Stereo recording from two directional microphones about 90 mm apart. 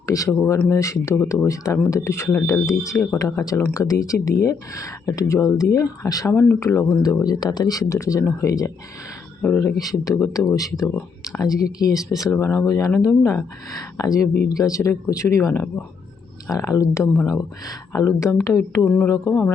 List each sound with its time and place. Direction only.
0.0 s a sound: 40° left (ahead or behind)
0.3 s speech: 35° left (ahead or behind)
6.3 s speech: 30° left (ahead or behind)
7.0 s speech: 45° left (ahead or behind)
9.4 s speech: 5° left (ahead or behind)
9.7 s speech: 40° left (ahead or behind)
13.9 s speech: 35° left (ahead or behind)